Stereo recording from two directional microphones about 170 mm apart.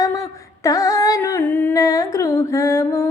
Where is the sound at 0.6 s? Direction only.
20° left (ahead or behind).